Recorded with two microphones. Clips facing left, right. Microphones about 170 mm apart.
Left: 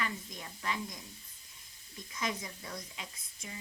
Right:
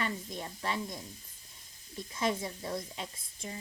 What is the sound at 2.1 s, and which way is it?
Speech, 30° right (ahead or behind).